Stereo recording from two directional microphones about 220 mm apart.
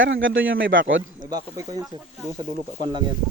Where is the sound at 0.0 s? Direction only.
60° right (ahead or behind).